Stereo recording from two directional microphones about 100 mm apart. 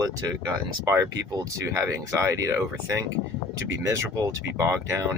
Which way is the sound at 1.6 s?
30° right (ahead or behind).